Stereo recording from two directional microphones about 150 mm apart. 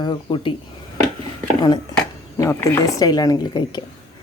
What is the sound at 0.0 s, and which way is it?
Speech, 30° left (ahead or behind).